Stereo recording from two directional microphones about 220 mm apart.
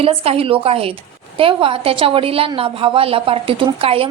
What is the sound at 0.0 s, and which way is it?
A woman's voice, 25° right (ahead or behind).